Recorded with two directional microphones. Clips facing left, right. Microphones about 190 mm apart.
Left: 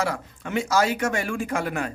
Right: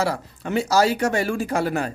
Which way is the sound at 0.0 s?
35° right (ahead or behind).